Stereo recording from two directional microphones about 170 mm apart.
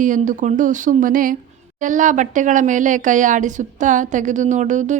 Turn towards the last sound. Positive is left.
turn(degrees=-45)  # may be behind; listen again after turning